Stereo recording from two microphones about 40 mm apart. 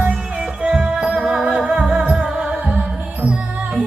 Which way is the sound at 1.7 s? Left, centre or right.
Right.